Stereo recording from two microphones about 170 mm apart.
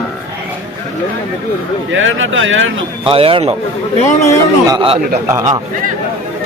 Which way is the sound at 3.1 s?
30° right (ahead or behind).